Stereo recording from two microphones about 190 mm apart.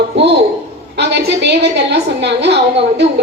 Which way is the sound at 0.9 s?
60° right (ahead or behind).